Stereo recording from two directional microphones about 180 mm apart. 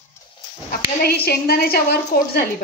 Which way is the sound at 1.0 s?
60° left (ahead or behind).